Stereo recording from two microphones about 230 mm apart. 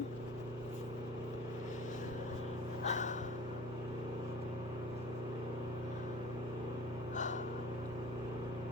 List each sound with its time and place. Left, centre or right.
2.8 s gasp: left